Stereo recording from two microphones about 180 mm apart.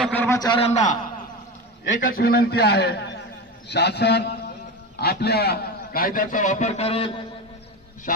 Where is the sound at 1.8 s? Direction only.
60° left (ahead or behind); by 7.1 s 35° left (ahead or behind).